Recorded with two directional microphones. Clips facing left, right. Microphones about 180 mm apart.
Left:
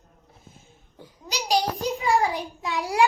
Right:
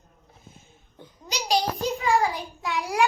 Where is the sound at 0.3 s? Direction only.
Centre (ahead or behind).